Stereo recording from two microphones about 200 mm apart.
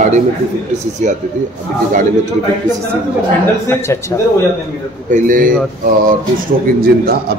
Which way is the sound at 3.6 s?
15° left (ahead or behind).